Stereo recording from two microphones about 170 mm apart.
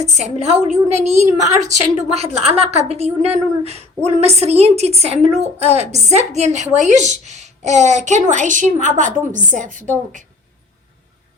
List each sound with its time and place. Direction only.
0.0 s a woman's voice: 40° right (ahead or behind)